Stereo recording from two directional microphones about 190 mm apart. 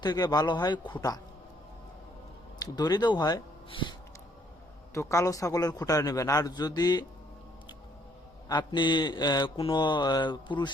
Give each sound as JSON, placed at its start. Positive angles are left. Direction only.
{"t": 0.0, "sound": "speech", "side_deg": 20}
{"t": 2.6, "sound": "speech", "side_deg": 20}
{"t": 4.9, "sound": "a man's voice", "side_deg": 15}
{"t": 8.4, "sound": "speech", "side_deg": 25}